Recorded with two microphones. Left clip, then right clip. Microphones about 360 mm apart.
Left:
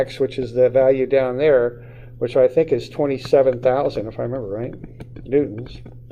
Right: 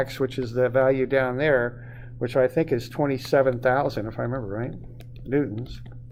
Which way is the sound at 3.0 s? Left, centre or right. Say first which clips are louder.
Left 5 dB; right.